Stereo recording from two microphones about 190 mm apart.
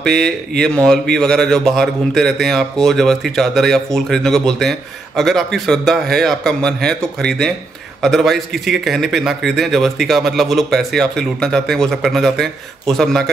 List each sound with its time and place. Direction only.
0.0 s speech: centre (ahead or behind)